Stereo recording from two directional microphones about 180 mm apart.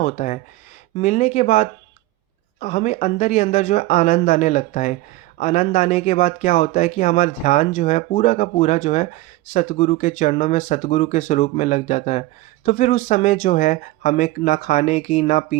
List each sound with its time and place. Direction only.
0.0 s speech: 40° left (ahead or behind)